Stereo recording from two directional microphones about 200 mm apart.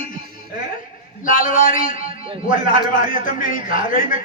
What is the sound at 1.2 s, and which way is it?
A man's voice, 40° left (ahead or behind).